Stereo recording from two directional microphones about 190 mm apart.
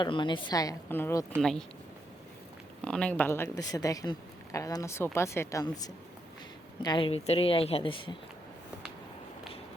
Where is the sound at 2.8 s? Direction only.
5° left (ahead or behind); by 8.1 s 25° left (ahead or behind).